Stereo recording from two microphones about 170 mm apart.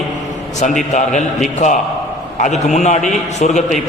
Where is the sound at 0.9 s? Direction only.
45° left (ahead or behind).